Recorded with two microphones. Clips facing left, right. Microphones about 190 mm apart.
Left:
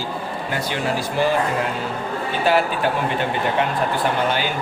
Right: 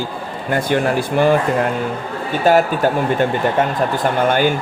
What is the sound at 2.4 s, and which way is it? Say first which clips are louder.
Speech: right 6 dB; 45° right (ahead or behind).